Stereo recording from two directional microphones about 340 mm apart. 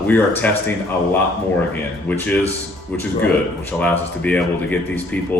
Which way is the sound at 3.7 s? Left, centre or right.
Centre.